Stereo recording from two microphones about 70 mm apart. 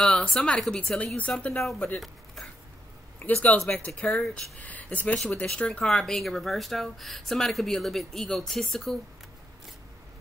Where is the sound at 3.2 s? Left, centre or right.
Left; by 9.0 s centre.